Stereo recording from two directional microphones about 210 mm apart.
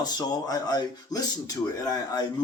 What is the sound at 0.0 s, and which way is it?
Speech, 20° left (ahead or behind).